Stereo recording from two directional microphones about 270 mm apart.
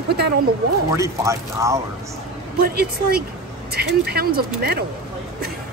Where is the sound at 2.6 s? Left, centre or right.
Right.